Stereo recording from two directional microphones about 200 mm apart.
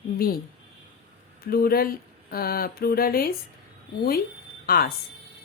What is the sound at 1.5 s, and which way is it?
Speech, 50° left (ahead or behind).